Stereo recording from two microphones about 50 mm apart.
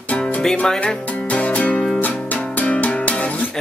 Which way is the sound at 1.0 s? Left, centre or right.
Left.